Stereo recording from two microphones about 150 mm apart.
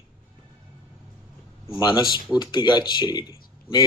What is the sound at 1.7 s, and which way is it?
Speech, 30° left (ahead or behind).